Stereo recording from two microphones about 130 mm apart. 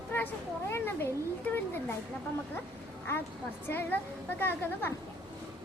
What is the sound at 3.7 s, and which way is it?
Speech, 15° left (ahead or behind).